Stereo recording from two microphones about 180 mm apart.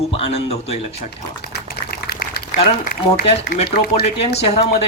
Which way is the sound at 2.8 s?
65° left (ahead or behind).